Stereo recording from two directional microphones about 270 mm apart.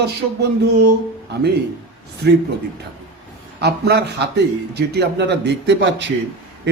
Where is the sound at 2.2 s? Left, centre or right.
Right.